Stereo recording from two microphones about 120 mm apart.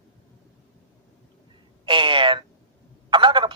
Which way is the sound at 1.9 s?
45° right (ahead or behind).